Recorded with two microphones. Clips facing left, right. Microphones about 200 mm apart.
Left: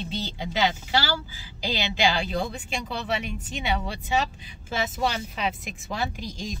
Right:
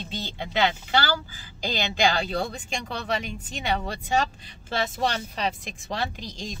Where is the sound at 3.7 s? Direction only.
45° right (ahead or behind).